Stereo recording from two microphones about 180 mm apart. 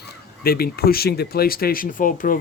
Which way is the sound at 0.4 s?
55° left (ahead or behind).